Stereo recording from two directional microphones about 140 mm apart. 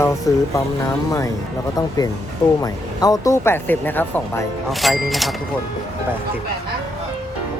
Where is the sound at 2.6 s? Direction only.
25° left (ahead or behind).